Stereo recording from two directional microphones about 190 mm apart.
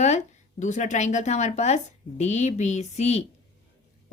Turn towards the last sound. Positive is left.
turn(degrees=35)  # may be behind; listen again after turning